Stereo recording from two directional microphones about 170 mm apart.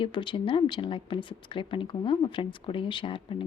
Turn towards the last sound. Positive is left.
turn(degrees=30)  # may be behind; listen again after turning